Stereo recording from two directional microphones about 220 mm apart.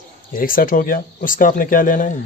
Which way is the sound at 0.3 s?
40° left (ahead or behind).